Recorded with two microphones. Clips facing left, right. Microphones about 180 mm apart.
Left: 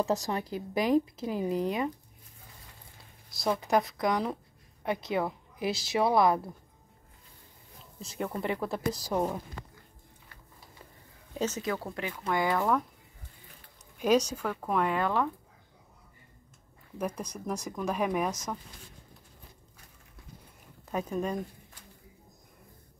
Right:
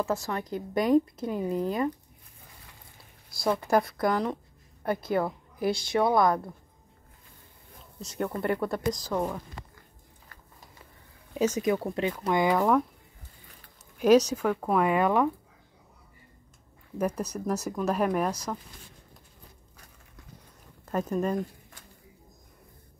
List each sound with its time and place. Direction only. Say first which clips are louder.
0.0 s a woman's voice: even; 20° left (ahead or behind)
1.2 s a woman's voice: right 1 dB; 5° left (ahead or behind)
3.3 s a woman's voice: right 2 dB; centre (ahead or behind)
8.0 s a woman's voice: right 3 dB; centre (ahead or behind)
9.0 s a woman's voice: even; 15° left (ahead or behind)
11.3 s speech: right 6 dB; 10° right (ahead or behind)
13.9 s speech: right 5 dB; 5° right (ahead or behind)
17.0 s speech: right 5 dB; 10° right (ahead or behind)
18.0 s a woman's voice: right 2 dB; 5° left (ahead or behind)
20.9 s a woman's voice: right 4 dB; centre (ahead or behind)